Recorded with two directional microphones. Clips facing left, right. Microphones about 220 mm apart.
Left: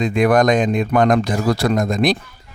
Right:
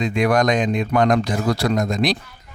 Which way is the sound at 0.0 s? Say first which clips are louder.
Left 3 dB; 50° left (ahead or behind).